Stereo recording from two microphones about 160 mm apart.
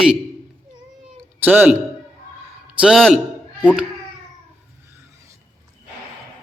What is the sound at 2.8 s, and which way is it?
Speech, centre (ahead or behind).